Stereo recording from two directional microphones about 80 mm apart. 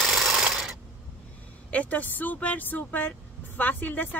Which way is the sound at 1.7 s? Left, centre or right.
Centre.